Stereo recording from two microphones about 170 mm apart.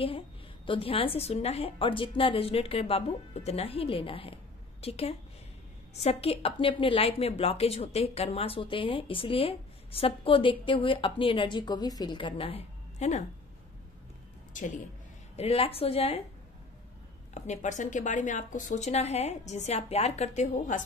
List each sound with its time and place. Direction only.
0.7 s a woman's voice: 35° left (ahead or behind)
15.3 s a woman's voice: 35° left (ahead or behind)
17.3 s a woman's voice: 45° left (ahead or behind)